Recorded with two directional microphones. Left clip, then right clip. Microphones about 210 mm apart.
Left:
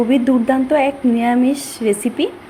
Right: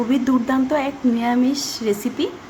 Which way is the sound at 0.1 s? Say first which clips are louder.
Left 4 dB; 15° left (ahead or behind).